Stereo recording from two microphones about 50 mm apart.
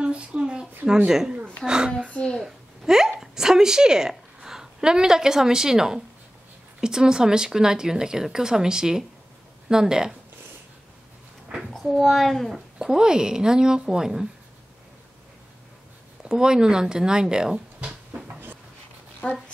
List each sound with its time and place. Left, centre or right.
0.0 s a sound: centre
1.0 s speech: centre
11.7 s a child's voice: centre
12.7 s speech: centre
16.3 s speech: centre
19.2 s speech: left